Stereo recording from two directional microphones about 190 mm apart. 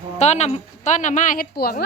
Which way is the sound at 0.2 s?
35° left (ahead or behind).